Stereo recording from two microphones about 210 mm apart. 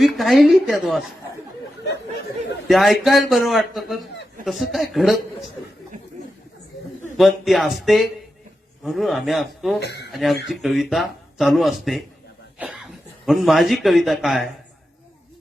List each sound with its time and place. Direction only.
0.0 s speech: centre (ahead or behind)
2.6 s speech: centre (ahead or behind)
7.2 s speech: centre (ahead or behind)
9.8 s speech: 55° left (ahead or behind)
10.1 s speech: centre (ahead or behind)